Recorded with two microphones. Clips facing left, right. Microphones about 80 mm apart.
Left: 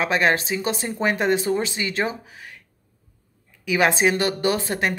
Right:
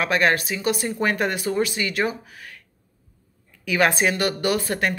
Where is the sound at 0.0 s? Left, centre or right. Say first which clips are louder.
Even; left.